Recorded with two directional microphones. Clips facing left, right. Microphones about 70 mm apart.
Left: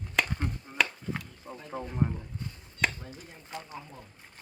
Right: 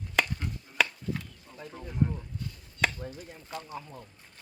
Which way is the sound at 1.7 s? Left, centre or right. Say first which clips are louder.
Left 4 dB; left.